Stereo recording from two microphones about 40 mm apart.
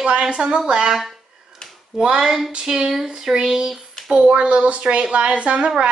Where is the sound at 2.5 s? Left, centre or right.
Right.